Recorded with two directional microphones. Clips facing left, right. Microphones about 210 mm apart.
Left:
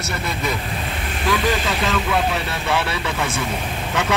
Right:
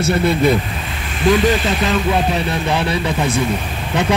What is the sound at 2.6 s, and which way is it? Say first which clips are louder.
Speech: right 1 dB; 15° right (ahead or behind).